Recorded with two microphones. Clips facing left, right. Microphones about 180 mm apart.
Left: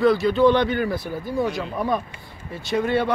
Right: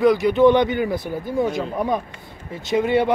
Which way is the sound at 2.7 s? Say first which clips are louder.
Right 3 dB; 15° right (ahead or behind).